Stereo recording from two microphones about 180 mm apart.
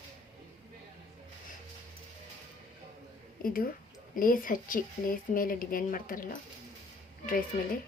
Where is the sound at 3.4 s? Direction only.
50° left (ahead or behind).